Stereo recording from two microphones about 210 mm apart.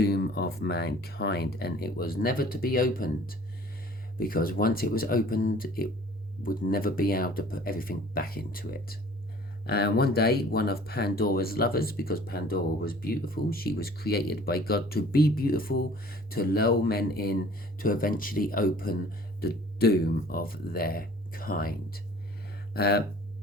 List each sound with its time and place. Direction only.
0.0 s speech: 50° left (ahead or behind)